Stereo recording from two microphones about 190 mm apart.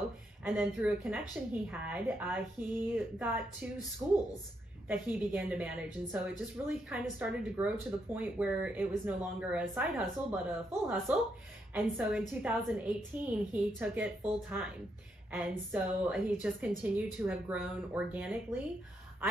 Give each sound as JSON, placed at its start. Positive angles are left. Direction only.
{"t": 0.4, "sound": "a woman's voice", "side_deg": 0}
{"t": 4.0, "sound": "speech", "side_deg": -15}
{"t": 4.8, "sound": "a woman's voice", "side_deg": 0}
{"t": 6.9, "sound": "a woman's voice", "side_deg": -5}